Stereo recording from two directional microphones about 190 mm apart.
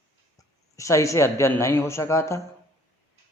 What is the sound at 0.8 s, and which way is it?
Speech, 15° left (ahead or behind).